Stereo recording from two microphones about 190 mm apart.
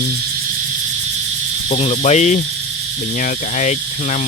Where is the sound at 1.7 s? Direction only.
35° left (ahead or behind).